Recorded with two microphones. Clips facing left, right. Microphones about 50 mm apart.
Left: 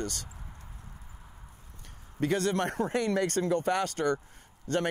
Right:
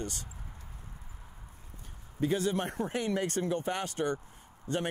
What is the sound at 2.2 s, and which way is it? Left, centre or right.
Speech, left.